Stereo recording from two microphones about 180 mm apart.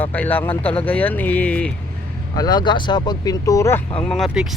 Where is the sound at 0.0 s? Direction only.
10° left (ahead or behind).